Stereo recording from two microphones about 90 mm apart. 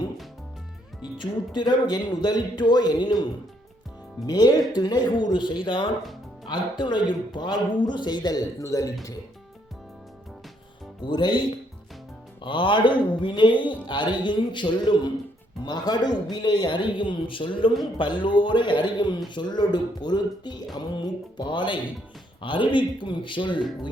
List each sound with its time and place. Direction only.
1.2 s speech: 55° left (ahead or behind)
4.3 s speech: 50° left (ahead or behind)
11.0 s speech: 55° left (ahead or behind)